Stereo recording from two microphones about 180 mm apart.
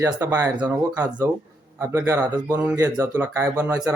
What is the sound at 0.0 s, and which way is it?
Speech, 15° right (ahead or behind).